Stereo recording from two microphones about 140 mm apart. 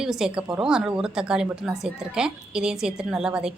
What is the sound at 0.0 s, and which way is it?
Speech, 5° right (ahead or behind).